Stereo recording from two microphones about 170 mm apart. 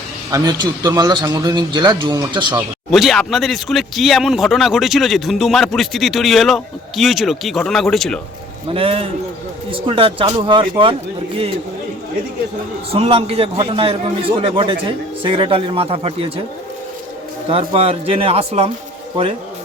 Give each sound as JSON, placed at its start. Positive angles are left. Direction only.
{"t": 0.3, "sound": "a man's voice", "side_deg": -20}
{"t": 2.6, "sound": "speech", "side_deg": 0}
{"t": 8.7, "sound": "a man's voice", "side_deg": -35}
{"t": 12.9, "sound": "a man's voice", "side_deg": -35}
{"t": 17.5, "sound": "a man's voice", "side_deg": -30}